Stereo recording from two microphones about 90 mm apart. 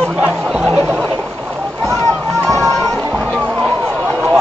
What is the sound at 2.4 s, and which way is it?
Music, 40° right (ahead or behind).